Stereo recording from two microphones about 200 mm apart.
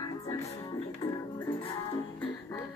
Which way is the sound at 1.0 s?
30° left (ahead or behind).